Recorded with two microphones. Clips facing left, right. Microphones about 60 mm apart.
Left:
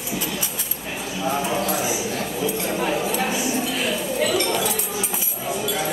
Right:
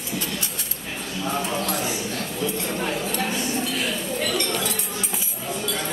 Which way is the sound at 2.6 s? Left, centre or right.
Centre.